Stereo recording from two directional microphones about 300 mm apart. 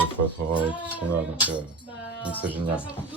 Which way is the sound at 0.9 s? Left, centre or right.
Centre.